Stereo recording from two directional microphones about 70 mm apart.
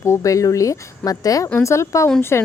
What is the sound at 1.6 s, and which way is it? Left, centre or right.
Speech, left.